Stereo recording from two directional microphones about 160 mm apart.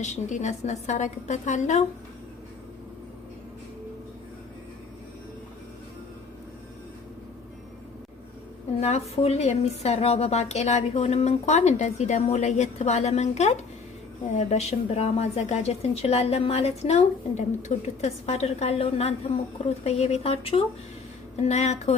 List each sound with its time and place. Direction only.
0.0 s a woman's voice: 50° left (ahead or behind)
8.8 s a woman's voice: 40° left (ahead or behind)